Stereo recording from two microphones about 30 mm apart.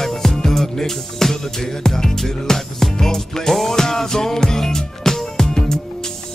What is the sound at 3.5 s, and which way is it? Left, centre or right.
Music, centre.